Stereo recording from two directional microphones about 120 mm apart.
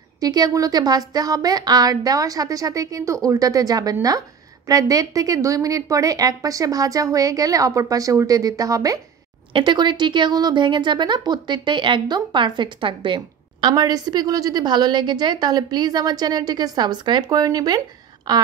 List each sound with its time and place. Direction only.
0.2 s a woman's voice: 30° right (ahead or behind)
9.5 s a woman's voice: 45° right (ahead or behind)